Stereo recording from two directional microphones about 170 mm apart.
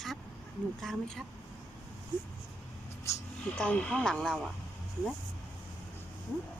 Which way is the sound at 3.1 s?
15° left (ahead or behind).